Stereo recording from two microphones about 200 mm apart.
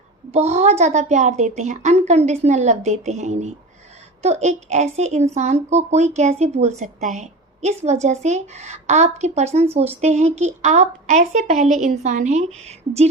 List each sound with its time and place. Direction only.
0.3 s a woman's voice: 30° right (ahead or behind)